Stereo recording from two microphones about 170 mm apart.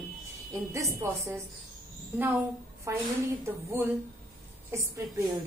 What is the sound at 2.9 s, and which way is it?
A woman's voice, 15° right (ahead or behind).